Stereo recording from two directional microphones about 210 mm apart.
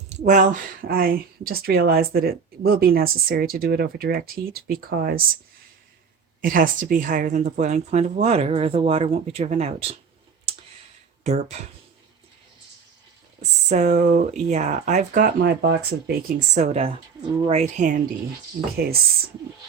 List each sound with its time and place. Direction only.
0.2 s speech: 40° right (ahead or behind)
6.4 s speech: 40° right (ahead or behind)
11.2 s speech: 30° right (ahead or behind)
13.7 s speech: 35° right (ahead or behind)